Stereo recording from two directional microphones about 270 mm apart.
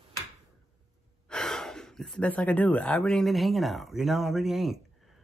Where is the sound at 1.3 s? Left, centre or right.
Centre.